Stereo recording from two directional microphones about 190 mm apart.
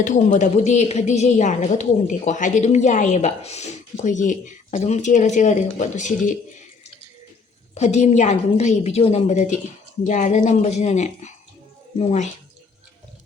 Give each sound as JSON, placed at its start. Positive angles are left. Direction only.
{"t": 0.0, "sound": "a woman's voice", "side_deg": 40}
{"t": 7.8, "sound": "a woman's voice", "side_deg": 35}